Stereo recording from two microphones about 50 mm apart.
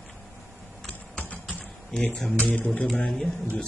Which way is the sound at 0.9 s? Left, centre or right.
Left.